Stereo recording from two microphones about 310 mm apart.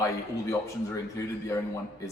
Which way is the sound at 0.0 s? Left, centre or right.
Centre.